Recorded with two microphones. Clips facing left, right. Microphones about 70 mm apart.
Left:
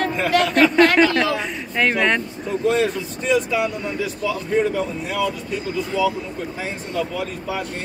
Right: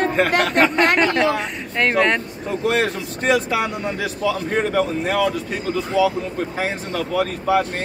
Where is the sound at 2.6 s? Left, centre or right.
Right.